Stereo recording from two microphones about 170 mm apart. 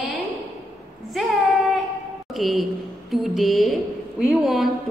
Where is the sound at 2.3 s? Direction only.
Centre (ahead or behind).